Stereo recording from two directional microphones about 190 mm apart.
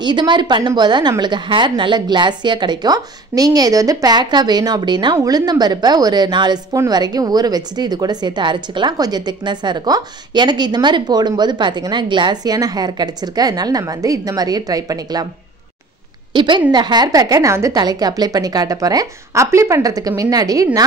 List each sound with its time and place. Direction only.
0.0 s a woman's voice: 25° right (ahead or behind)
16.3 s a woman's voice: 25° right (ahead or behind)